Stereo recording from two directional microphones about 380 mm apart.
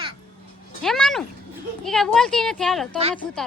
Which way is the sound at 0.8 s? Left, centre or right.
Centre.